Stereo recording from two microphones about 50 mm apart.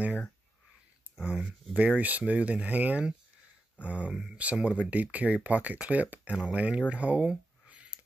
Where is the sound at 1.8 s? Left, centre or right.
Right.